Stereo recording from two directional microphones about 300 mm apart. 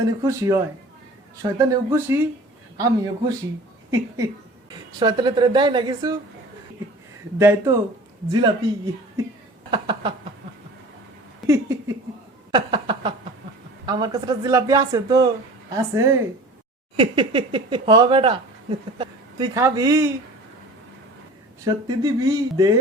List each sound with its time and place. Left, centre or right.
0.0 s speech: centre
4.9 s speech: centre
7.3 s speech: centre
9.7 s speech: centre
11.3 s a sound: centre
13.8 s a woman's voice: centre
21.6 s speech: centre